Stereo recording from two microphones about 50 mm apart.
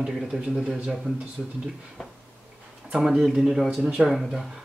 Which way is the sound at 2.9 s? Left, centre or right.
Centre.